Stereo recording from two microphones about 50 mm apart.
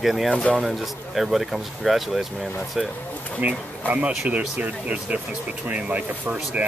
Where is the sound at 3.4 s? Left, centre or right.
Right.